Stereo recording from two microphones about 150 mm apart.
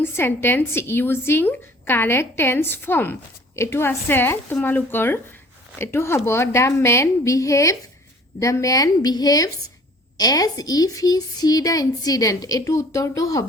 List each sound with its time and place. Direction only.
0.0 s a woman's voice: 15° left (ahead or behind)